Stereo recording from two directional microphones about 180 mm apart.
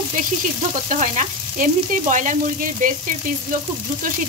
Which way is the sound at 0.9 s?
45° right (ahead or behind).